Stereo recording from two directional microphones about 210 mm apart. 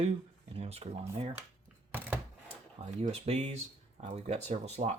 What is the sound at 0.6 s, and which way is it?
Speech, 30° right (ahead or behind).